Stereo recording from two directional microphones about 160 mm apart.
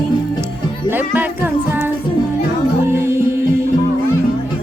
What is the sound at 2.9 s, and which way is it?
Music, 15° right (ahead or behind).